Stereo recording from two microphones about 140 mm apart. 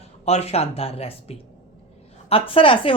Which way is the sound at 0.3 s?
50° left (ahead or behind).